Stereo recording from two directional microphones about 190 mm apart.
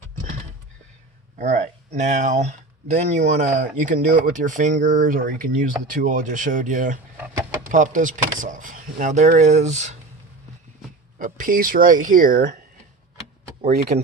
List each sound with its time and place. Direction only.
1.4 s speech: 40° right (ahead or behind)
11.2 s speech: 45° right (ahead or behind)
13.9 s speech: 35° right (ahead or behind)